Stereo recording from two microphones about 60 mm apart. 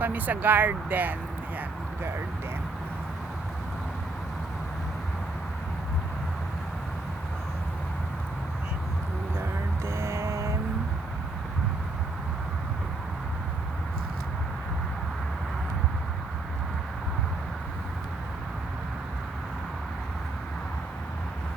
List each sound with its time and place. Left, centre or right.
0.0 s speech: right
9.8 s music: right